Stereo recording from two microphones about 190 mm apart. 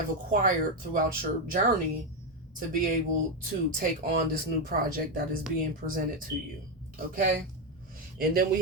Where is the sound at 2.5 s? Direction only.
45° right (ahead or behind).